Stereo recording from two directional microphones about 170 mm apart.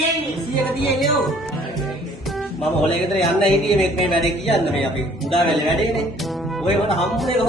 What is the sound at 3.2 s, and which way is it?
Speech, centre (ahead or behind).